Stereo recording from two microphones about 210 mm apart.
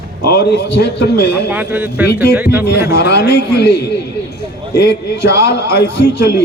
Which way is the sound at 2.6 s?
50° left (ahead or behind).